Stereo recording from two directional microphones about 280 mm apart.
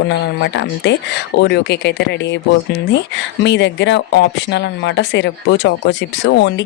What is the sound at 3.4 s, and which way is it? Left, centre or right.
Speech, left.